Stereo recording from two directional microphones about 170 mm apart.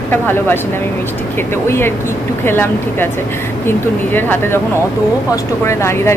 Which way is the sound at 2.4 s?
10° left (ahead or behind).